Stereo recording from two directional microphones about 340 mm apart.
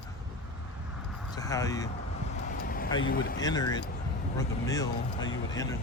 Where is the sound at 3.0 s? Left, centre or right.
Left.